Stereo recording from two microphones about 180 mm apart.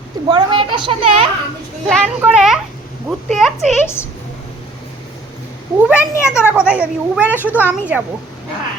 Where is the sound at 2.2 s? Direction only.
5° right (ahead or behind).